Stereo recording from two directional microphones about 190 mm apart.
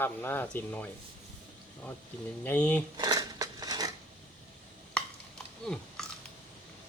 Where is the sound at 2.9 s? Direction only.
20° right (ahead or behind).